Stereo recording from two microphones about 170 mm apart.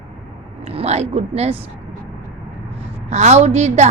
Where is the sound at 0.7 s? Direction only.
35° right (ahead or behind).